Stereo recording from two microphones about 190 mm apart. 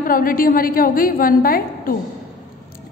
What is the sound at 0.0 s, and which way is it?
A woman's voice, 50° left (ahead or behind).